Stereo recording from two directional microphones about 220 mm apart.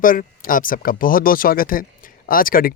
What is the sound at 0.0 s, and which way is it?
Speech, 40° left (ahead or behind).